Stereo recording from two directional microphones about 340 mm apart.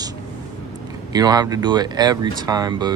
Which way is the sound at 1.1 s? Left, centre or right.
Centre.